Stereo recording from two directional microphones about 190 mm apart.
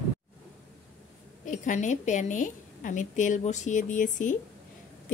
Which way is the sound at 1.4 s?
40° left (ahead or behind).